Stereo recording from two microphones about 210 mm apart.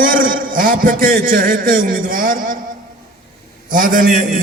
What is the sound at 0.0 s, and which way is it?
A man's voice, 40° right (ahead or behind).